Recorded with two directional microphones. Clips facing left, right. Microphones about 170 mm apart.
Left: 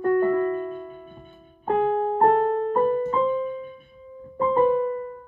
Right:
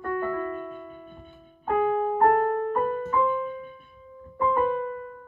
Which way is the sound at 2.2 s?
25° left (ahead or behind).